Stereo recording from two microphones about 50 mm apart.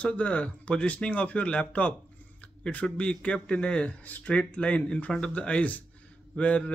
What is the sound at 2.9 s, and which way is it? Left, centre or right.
Speech, left.